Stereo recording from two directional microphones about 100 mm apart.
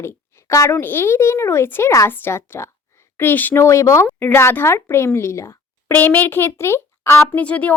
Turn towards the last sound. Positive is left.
turn(degrees=15)  # may be behind; listen again after turning